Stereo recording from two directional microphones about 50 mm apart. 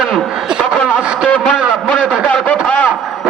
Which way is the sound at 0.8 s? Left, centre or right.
Left.